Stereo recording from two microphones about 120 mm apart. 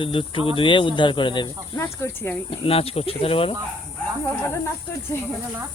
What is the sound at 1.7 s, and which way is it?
Speech, 25° left (ahead or behind).